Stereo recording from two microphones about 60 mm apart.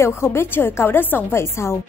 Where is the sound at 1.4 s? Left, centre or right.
Left.